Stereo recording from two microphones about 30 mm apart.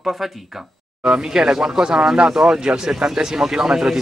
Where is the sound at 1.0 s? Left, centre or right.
Right.